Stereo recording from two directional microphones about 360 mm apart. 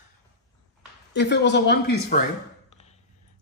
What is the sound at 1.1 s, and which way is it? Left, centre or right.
Speech, left.